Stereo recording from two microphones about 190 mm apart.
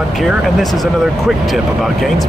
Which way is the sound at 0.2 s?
Centre (ahead or behind).